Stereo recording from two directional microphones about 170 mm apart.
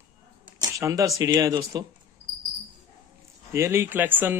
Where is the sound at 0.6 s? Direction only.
20° right (ahead or behind).